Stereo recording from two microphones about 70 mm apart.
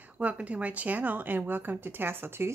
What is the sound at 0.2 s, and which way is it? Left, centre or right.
A woman's voice, centre.